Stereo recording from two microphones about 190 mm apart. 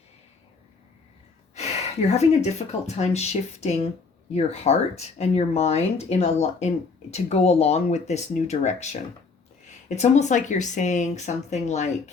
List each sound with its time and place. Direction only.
1.5 s speech: 35° left (ahead or behind)